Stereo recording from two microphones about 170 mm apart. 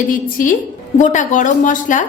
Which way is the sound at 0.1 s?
50° left (ahead or behind).